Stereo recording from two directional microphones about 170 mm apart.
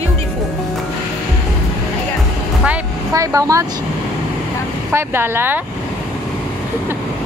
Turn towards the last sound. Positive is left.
turn(degrees=-10)  # may be behind; listen again after turning